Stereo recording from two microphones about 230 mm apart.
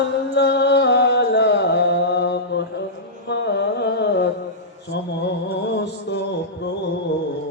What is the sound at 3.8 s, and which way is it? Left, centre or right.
Music, left.